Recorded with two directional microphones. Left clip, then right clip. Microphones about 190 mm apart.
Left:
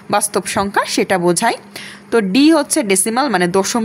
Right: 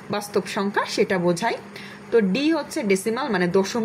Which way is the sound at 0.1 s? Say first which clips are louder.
Left 8 dB; 45° left (ahead or behind).